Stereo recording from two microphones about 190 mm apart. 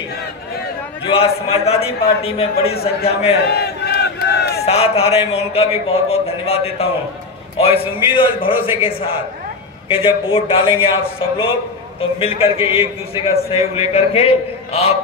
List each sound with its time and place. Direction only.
1.0 s a man's voice: 30° left (ahead or behind)
2.7 s a man's voice: 55° left (ahead or behind)
3.1 s a man's voice: 30° left (ahead or behind)
3.4 s crowd: 60° left (ahead or behind)
4.6 s a man's voice: 35° left (ahead or behind)